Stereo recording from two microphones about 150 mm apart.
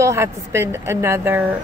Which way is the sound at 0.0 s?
20° right (ahead or behind).